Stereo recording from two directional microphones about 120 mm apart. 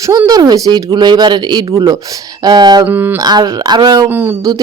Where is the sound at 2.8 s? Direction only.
15° right (ahead or behind).